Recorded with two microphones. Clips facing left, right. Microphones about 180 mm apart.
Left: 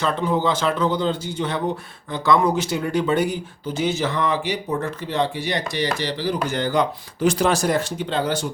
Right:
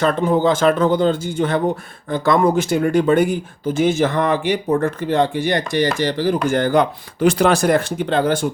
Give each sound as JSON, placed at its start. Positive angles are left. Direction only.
{"t": 0.0, "sound": "speech", "side_deg": -50}